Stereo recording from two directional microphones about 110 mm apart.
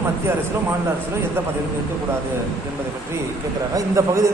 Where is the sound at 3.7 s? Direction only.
30° right (ahead or behind).